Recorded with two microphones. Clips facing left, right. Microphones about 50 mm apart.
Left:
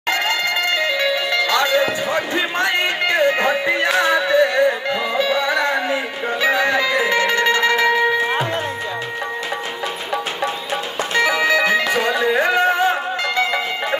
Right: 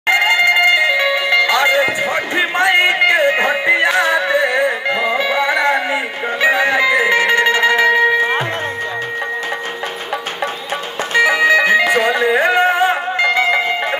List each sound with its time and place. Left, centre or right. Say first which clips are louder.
0.1 s music: right 7 dB; centre
11.1 s music: right 5 dB; centre